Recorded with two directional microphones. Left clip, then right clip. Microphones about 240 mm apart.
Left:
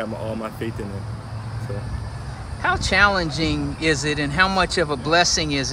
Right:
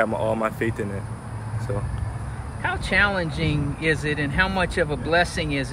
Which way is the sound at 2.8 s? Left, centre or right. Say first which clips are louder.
Left 3 dB; centre.